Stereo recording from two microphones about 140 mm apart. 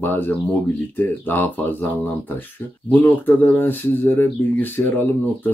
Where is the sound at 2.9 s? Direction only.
15° left (ahead or behind).